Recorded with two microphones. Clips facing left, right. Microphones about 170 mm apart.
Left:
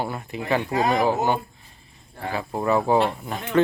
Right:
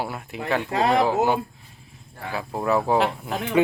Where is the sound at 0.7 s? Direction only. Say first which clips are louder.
Right 2 dB; 75° right (ahead or behind).